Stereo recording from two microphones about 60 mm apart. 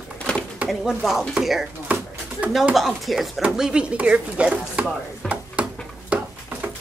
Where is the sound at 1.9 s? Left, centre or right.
Right.